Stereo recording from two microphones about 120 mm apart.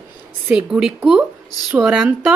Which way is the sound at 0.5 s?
5° right (ahead or behind).